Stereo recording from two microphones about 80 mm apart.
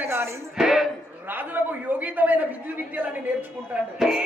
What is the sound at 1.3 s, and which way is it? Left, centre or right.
A man's voice, right.